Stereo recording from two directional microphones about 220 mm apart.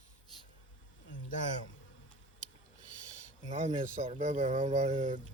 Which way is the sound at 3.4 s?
30° right (ahead or behind).